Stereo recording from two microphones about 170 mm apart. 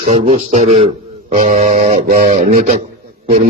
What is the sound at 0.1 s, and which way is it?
A man's voice, 35° right (ahead or behind).